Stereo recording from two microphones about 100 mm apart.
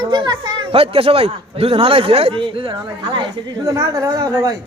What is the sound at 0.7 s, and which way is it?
A man's voice, 70° right (ahead or behind).